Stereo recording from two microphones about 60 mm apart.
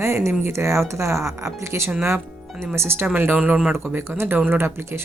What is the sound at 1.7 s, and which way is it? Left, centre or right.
A woman's voice, right.